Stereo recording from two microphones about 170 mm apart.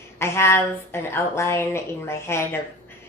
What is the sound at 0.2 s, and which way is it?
Speech, 15° left (ahead or behind).